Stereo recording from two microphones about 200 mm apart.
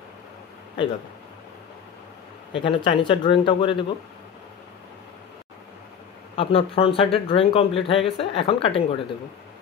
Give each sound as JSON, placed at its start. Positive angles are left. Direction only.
{"t": 2.5, "sound": "speech", "side_deg": 25}
{"t": 6.3, "sound": "speech", "side_deg": 30}